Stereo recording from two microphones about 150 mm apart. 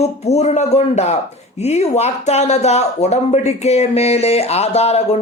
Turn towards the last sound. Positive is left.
turn(degrees=45)  # may be behind; listen again after turning